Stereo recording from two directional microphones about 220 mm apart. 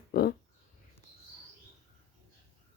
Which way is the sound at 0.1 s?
45° left (ahead or behind).